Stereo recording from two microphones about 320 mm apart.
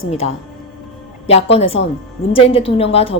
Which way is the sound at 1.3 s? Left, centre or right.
Centre.